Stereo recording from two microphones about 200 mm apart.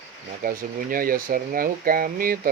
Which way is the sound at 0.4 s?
45° right (ahead or behind).